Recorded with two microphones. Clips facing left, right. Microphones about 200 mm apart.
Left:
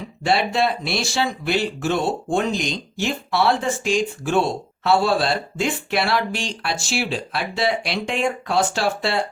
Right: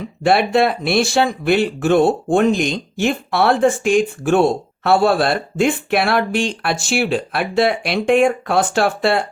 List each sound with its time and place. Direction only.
0.3 s speech: 55° right (ahead or behind)